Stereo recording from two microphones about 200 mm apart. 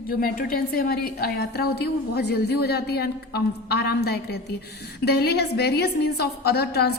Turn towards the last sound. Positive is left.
turn(degrees=55)  # may be behind; listen again after turning